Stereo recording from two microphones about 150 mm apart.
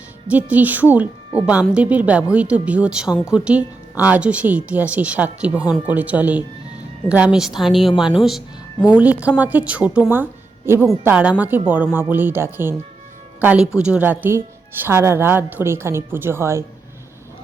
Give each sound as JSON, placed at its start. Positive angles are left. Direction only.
{"t": 0.3, "sound": "a woman's voice", "side_deg": -10}